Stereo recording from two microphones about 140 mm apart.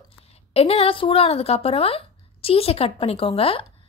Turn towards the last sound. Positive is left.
turn(degrees=40)  # may be behind; listen again after turning